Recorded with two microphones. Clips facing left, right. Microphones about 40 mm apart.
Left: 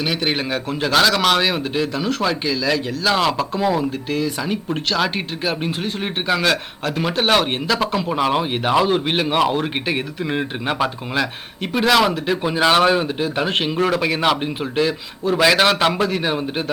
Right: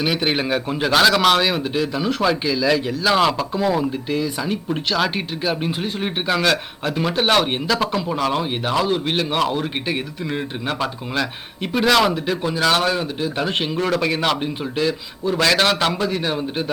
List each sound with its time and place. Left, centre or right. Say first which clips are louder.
0.0 s speech: right 1 dB; centre
8.1 s speech: left 2 dB; centre
12.5 s speech: left 4 dB; left
13.2 s speech: left 2 dB; centre